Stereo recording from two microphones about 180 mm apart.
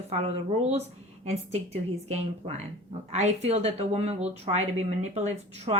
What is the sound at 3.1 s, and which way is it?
Speech, 35° right (ahead or behind).